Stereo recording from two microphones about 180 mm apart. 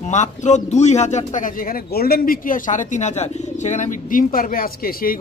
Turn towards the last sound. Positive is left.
turn(degrees=55)  # may be behind; listen again after turning